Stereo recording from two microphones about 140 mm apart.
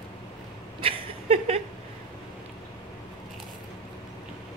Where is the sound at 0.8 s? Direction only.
45° right (ahead or behind).